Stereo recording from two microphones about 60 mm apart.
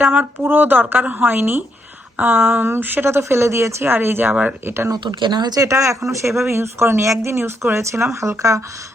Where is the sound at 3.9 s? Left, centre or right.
Right.